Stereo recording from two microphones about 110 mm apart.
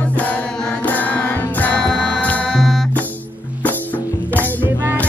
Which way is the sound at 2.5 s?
Centre (ahead or behind).